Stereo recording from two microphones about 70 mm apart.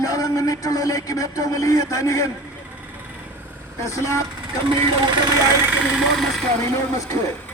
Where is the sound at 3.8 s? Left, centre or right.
Left.